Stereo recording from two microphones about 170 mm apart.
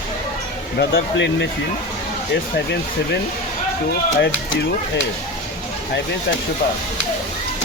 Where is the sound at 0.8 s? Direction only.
90° left.